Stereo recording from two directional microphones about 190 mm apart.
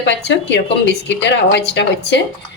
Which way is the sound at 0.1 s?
65° left (ahead or behind).